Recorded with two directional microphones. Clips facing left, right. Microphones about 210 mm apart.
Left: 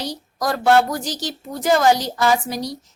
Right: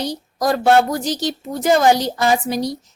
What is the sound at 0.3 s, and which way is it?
A woman's voice, 25° right (ahead or behind).